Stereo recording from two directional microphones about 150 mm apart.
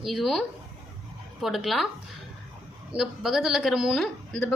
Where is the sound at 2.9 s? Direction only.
5° right (ahead or behind).